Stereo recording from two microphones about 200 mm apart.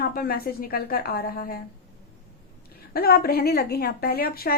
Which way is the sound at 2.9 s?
50° left (ahead or behind).